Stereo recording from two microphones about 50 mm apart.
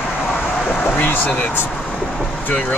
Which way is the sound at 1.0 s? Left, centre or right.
Left.